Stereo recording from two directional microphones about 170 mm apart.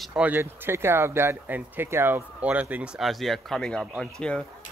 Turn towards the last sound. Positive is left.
turn(degrees=5)  # may be behind; listen again after turning